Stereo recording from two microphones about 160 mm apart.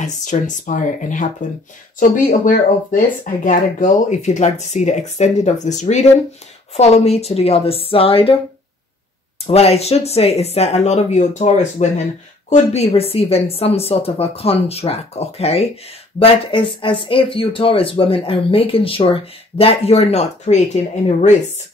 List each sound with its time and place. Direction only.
0.0 s speech: 50° left (ahead or behind); by 8.4 s 35° left (ahead or behind)
9.5 s speech: 40° left (ahead or behind)